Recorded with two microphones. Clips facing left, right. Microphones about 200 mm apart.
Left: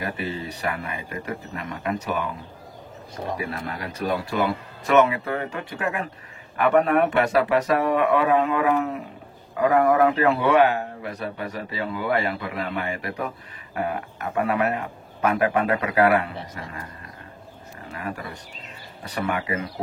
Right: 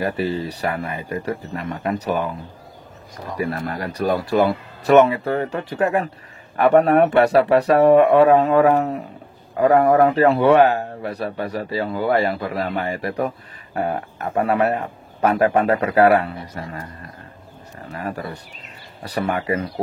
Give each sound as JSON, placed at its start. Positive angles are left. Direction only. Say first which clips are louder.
{"t": 0.0, "sound": "a man's voice", "louder": "right 7 dB", "side_deg": -35}
{"t": 3.3, "sound": "a man's voice", "louder": "right 6 dB", "side_deg": -40}
{"t": 17.9, "sound": "a man's voice", "louder": "right 4 dB", "side_deg": -35}